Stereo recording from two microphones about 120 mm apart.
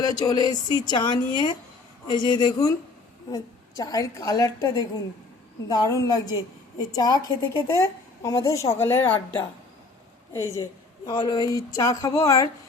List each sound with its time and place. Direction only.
0.0 s a woman's voice: 35° left (ahead or behind)
11.0 s a woman's voice: 35° left (ahead or behind)